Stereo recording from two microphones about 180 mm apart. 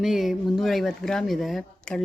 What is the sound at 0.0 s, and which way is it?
Speech, centre (ahead or behind).